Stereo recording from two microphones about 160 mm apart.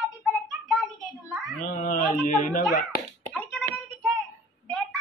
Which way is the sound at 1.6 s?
50° left (ahead or behind).